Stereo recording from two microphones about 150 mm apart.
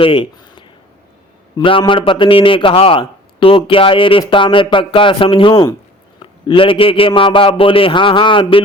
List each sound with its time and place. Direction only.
0.0 s a man's voice: 35° left (ahead or behind)